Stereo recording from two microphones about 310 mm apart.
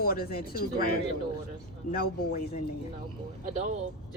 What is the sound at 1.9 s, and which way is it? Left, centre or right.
Speech, left.